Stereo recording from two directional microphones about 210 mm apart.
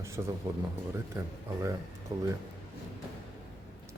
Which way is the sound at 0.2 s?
15° right (ahead or behind).